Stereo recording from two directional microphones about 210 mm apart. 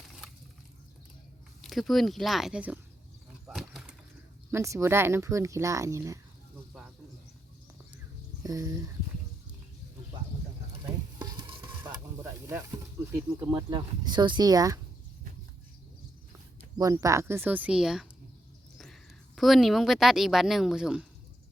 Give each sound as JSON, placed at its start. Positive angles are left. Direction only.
{"t": 1.6, "sound": "speech", "side_deg": 0}
{"t": 3.4, "sound": "a sound", "side_deg": 0}
{"t": 4.5, "sound": "speech", "side_deg": -15}
{"t": 8.4, "sound": "speech", "side_deg": -15}
{"t": 10.8, "sound": "stir", "side_deg": -20}
{"t": 11.9, "sound": "sizzle", "side_deg": -15}
{"t": 13.1, "sound": "speech", "side_deg": -15}
{"t": 16.7, "sound": "speech", "side_deg": -15}
{"t": 19.4, "sound": "speech", "side_deg": 0}